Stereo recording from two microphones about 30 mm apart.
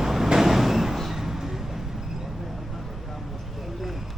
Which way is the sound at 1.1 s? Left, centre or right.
Centre.